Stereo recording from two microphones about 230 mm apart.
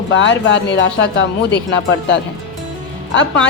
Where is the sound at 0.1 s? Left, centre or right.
Left.